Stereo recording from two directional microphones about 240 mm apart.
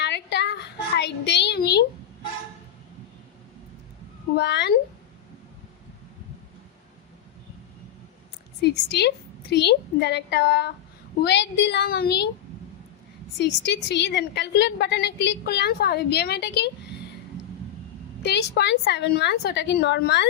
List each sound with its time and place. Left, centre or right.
0.0 s child singing: left
0.9 s a sound: left
4.4 s a woman's voice: left
8.6 s a woman's voice: left
13.4 s a woman's voice: left
18.2 s a woman's voice: left